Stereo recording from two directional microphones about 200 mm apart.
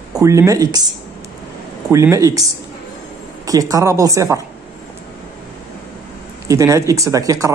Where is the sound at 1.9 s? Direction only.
15° right (ahead or behind).